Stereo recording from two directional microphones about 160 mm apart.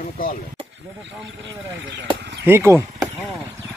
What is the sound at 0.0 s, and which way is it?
Speech, 60° left (ahead or behind).